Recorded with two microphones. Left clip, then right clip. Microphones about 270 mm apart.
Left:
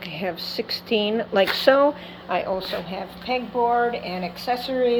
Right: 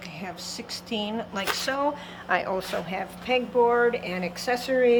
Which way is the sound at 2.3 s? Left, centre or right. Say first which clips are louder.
Left 1 dB; centre.